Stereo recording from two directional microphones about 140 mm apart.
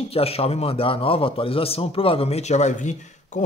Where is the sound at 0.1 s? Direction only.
45° left (ahead or behind).